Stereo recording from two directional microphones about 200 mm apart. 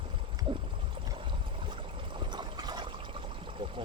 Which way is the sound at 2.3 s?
20° right (ahead or behind).